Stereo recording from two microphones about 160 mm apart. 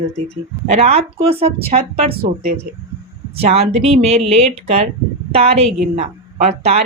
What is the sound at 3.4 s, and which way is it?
Speech, 40° right (ahead or behind).